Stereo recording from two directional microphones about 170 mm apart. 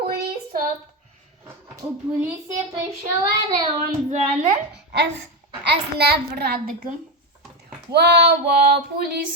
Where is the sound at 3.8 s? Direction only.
50° right (ahead or behind).